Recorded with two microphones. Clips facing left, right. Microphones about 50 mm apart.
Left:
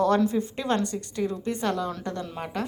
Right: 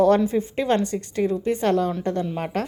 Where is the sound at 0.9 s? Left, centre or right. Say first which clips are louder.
Right 6 dB; right.